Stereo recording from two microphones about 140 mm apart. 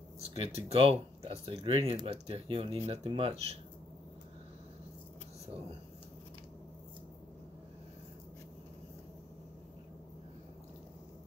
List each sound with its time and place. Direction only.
0.2 s speech: 45° right (ahead or behind)